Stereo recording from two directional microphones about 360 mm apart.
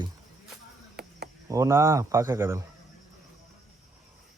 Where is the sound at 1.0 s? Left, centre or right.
Right.